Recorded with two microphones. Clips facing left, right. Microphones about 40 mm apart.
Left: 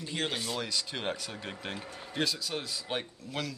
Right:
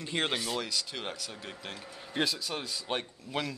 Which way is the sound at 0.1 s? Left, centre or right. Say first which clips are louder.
Right 3 dB; right.